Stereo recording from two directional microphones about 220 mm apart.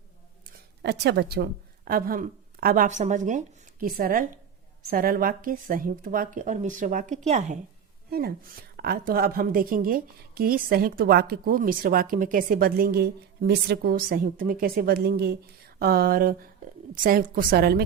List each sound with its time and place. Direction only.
0.8 s a woman's voice: 50° right (ahead or behind); by 7.6 s 30° right (ahead or behind)
8.7 s a woman's voice: 45° right (ahead or behind)